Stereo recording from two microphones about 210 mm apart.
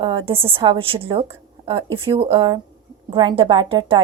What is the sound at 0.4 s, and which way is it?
A woman's voice, 25° right (ahead or behind).